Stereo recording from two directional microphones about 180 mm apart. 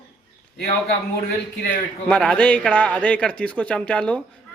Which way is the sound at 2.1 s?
5° left (ahead or behind).